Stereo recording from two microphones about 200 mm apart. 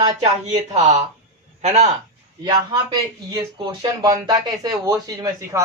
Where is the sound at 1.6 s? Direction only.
35° right (ahead or behind).